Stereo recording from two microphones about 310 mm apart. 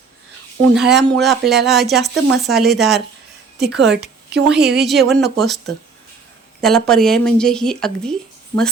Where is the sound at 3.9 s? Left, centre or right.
Right.